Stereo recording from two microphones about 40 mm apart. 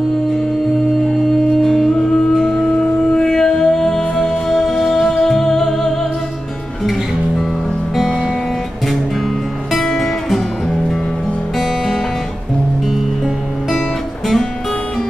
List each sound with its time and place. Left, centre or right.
1.6 s music: centre
2.6 s music: centre
9.8 s music: centre
13.7 s music: centre